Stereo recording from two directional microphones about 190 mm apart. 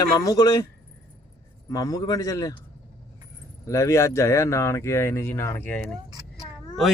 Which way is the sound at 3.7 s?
15° left (ahead or behind).